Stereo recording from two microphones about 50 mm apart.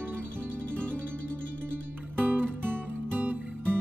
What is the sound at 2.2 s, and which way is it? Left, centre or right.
Music, right.